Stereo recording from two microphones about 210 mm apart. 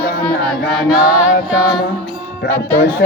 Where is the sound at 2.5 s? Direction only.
10° left (ahead or behind).